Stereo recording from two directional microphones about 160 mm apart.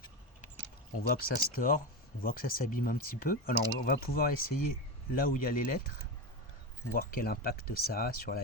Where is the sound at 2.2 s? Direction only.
65° left (ahead or behind).